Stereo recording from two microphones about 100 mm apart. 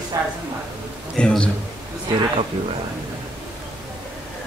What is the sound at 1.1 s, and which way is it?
Speech, 10° left (ahead or behind).